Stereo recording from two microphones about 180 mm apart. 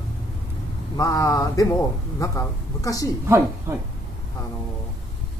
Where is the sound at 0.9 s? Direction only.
20° left (ahead or behind).